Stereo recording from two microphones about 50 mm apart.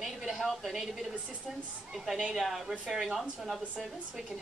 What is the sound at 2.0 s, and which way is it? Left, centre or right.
Speech, centre.